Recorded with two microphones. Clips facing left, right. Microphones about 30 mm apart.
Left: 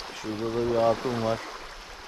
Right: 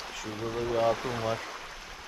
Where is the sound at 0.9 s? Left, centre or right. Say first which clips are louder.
Left 4 dB; left.